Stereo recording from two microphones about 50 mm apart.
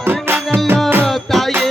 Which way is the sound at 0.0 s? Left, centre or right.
Right.